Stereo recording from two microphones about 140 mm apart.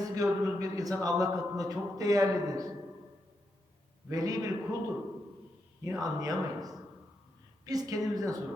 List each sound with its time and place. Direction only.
0.0 s speech: 25° right (ahead or behind)
4.1 s speech: 25° right (ahead or behind)
5.8 s speech: 25° right (ahead or behind)